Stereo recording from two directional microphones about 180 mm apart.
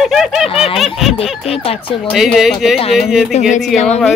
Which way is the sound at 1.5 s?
30° left (ahead or behind).